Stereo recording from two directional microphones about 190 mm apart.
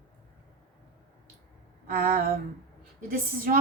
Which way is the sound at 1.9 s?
50° right (ahead or behind).